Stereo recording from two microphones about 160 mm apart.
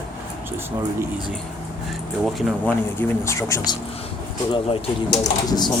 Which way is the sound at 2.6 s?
15° left (ahead or behind).